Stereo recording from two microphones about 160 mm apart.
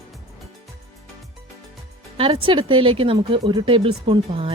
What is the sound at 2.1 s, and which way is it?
Speech, 35° right (ahead or behind).